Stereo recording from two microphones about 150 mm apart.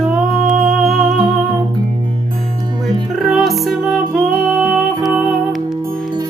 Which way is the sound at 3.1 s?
Centre (ahead or behind).